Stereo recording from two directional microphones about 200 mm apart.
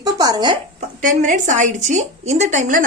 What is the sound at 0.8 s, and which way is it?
A woman's voice, 40° right (ahead or behind).